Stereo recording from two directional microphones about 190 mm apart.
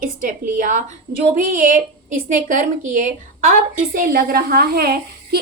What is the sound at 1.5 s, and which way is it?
A woman's voice, 45° right (ahead or behind).